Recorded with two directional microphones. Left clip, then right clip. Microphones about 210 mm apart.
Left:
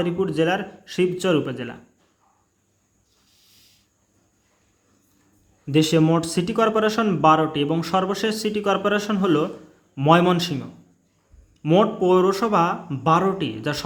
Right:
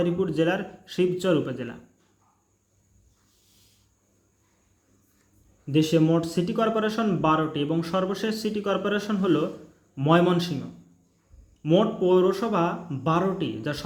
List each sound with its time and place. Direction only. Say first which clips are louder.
0.0 s speech: left 2 dB; 10° left (ahead or behind)
5.6 s speech: left 3 dB; 20° left (ahead or behind)
11.6 s speech: left 4 dB; 20° left (ahead or behind)